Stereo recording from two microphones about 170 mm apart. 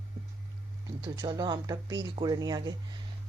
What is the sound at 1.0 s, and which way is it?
Speech, 25° right (ahead or behind).